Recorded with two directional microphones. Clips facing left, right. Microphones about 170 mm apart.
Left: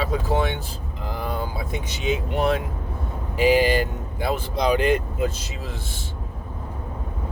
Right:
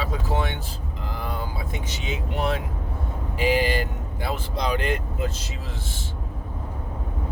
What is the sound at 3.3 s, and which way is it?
Speech, 15° left (ahead or behind).